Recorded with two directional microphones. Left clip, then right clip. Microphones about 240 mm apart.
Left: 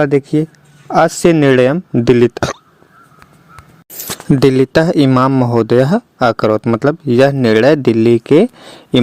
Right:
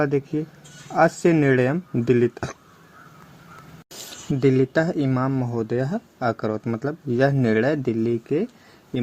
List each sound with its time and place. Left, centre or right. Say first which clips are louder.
0.0 s speech: left 10 dB; left
0.9 s speech: left 8 dB; left
3.9 s a sound: left 7 dB; centre
4.4 s speech: left 9 dB; left